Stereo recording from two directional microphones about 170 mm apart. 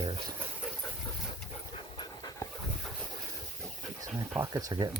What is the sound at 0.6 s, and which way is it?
Dog, 5° right (ahead or behind).